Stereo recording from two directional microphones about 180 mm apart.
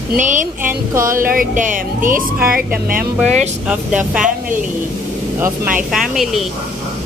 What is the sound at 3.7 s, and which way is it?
Speech, 5° right (ahead or behind).